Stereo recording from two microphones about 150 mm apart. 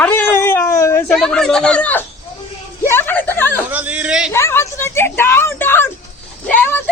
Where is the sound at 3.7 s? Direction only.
10° right (ahead or behind).